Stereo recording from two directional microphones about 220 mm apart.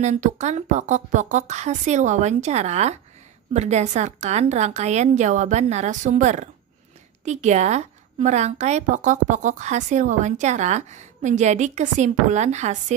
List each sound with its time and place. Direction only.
0.0 s a woman's voice: 35° right (ahead or behind)